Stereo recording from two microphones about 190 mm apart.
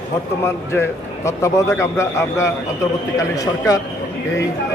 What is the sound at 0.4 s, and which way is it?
A man's voice, 15° left (ahead or behind).